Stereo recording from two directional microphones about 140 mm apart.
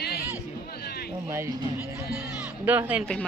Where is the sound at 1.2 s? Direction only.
20° right (ahead or behind).